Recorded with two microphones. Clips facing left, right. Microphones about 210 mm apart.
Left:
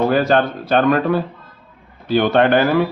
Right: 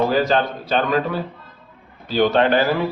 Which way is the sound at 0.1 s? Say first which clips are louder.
Left 3 dB; 55° left (ahead or behind).